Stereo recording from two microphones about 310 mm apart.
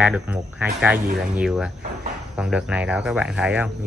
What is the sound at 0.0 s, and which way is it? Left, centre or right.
Speech, centre.